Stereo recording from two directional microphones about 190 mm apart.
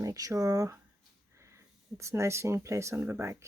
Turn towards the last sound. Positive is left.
turn(degrees=-15)  # may be behind; listen again after turning